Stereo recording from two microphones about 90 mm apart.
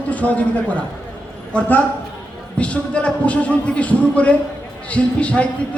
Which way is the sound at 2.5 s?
15° left (ahead or behind).